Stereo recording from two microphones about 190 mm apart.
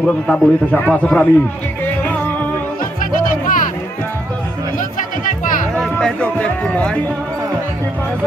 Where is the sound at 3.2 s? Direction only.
45° left (ahead or behind).